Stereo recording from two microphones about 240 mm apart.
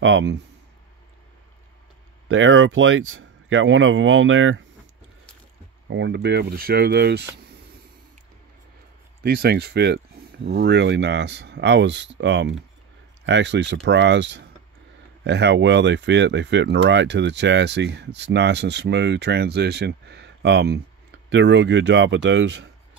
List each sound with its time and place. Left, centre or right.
0.0 s speech: right
2.2 s speech: right
5.9 s speech: right
9.2 s speech: right